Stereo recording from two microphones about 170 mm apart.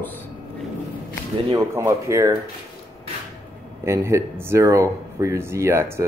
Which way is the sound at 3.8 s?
15° right (ahead or behind).